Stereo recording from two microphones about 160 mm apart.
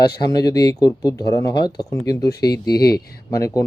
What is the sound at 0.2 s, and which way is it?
A man's voice, 25° left (ahead or behind).